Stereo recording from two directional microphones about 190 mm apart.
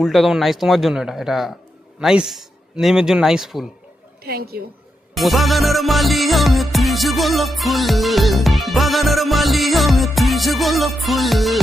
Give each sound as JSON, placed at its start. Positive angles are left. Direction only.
{"t": 0.0, "sound": "music", "side_deg": 0}
{"t": 4.2, "sound": "a woman's voice", "side_deg": -55}
{"t": 5.1, "sound": "music", "side_deg": 0}